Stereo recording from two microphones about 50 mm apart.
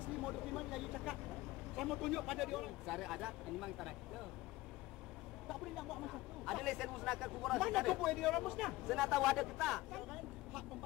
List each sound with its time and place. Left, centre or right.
0.3 s vehicle: centre
1.8 s speech: centre
5.5 s speech: centre